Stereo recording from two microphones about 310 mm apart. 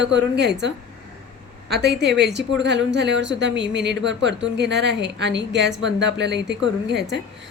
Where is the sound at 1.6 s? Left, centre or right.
Right.